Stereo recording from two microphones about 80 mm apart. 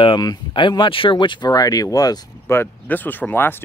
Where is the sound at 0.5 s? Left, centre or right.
Left.